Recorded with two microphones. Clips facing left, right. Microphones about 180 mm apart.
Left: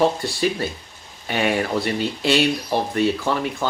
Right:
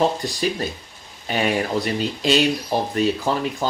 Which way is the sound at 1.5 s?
15° right (ahead or behind).